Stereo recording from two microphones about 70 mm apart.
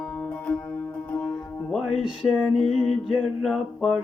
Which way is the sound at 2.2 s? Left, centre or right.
Centre.